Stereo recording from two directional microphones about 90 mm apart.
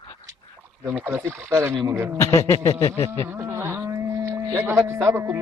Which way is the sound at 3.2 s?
25° right (ahead or behind).